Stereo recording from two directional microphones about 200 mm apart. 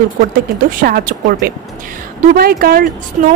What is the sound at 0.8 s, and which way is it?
Speech, 45° right (ahead or behind).